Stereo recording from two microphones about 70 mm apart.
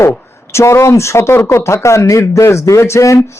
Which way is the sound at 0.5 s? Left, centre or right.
Left.